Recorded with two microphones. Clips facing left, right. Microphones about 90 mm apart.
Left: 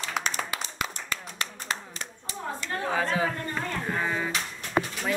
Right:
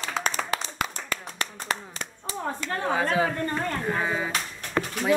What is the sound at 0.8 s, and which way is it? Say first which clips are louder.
Clapping: right 2 dB; 50° right (ahead or behind).